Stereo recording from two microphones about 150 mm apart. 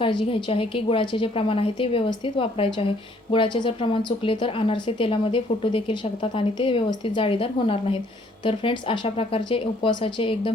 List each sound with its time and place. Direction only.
0.0 s a woman's voice: 35° left (ahead or behind)